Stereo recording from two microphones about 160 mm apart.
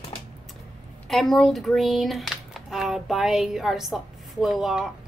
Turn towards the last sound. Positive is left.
turn(degrees=0)  # may be behind; listen again after turning